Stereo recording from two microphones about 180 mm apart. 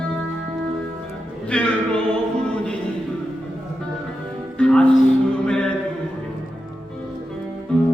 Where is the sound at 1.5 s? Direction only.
5° left (ahead or behind).